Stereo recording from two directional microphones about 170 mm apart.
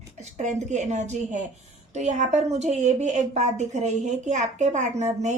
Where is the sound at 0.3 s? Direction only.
45° right (ahead or behind).